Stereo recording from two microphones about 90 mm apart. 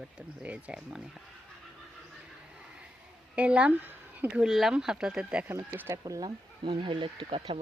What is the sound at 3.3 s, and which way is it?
Speech, 15° right (ahead or behind).